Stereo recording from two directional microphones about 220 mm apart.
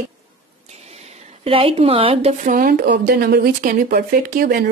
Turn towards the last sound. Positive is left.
turn(degrees=-45)  # may be behind; listen again after turning